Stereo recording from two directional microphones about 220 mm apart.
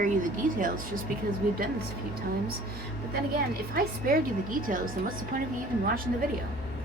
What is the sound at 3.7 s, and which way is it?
A woman's voice, 40° right (ahead or behind).